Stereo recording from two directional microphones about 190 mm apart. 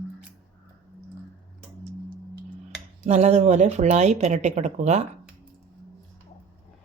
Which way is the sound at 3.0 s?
35° right (ahead or behind).